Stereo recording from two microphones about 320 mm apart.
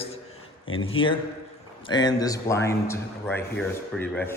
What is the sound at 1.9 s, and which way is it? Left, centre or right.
A man's voice, centre.